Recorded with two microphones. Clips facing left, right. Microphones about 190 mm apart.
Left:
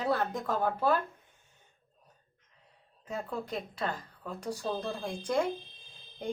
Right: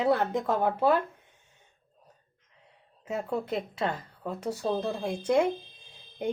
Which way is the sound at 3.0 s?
25° right (ahead or behind).